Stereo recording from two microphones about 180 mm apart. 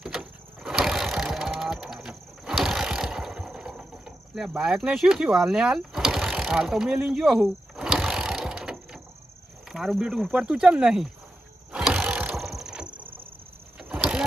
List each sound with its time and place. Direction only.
0.0 s a sound: 5° right (ahead or behind)
9.6 s speech: centre (ahead or behind)
11.7 s wild animals: centre (ahead or behind)
12.9 s vehicle: 25° right (ahead or behind)
13.7 s vehicle: 5° right (ahead or behind)